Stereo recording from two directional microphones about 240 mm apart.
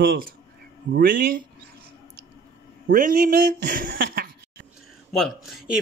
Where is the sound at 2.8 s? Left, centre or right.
Right.